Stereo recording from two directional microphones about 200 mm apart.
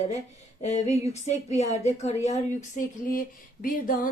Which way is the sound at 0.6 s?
35° left (ahead or behind).